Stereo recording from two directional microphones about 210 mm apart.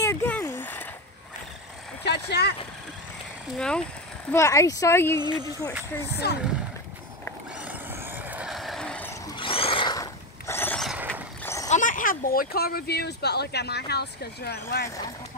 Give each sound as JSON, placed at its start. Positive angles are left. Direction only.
{"t": 0.0, "sound": "a sound", "side_deg": 15}
{"t": 2.0, "sound": "vehicle", "side_deg": 50}
{"t": 3.5, "sound": "speech", "side_deg": 5}
{"t": 4.3, "sound": "speech", "side_deg": 15}
{"t": 6.2, "sound": "speech", "side_deg": 50}
{"t": 7.6, "sound": "vehicle", "side_deg": -10}
{"t": 9.3, "sound": "boat", "side_deg": 25}
{"t": 11.4, "sound": "horse", "side_deg": 15}
{"t": 11.7, "sound": "speech", "side_deg": 40}